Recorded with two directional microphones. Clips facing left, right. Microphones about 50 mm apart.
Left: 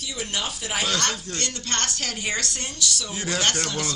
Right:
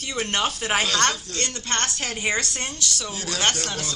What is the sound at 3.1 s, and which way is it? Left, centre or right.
Speech, left.